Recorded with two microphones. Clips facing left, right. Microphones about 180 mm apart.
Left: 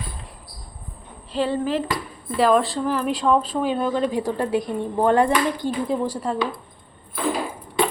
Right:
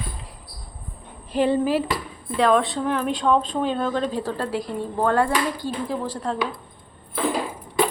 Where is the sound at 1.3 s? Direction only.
15° right (ahead or behind).